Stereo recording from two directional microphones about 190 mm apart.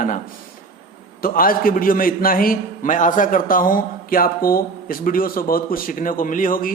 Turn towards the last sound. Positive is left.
turn(degrees=45)  # may be behind; listen again after turning